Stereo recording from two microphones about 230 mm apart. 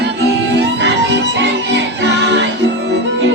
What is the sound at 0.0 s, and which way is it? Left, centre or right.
Music, right.